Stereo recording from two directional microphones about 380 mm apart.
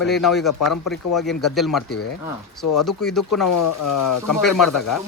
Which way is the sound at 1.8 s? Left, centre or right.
Left.